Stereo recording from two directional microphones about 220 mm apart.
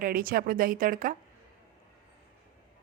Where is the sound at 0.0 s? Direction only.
40° right (ahead or behind).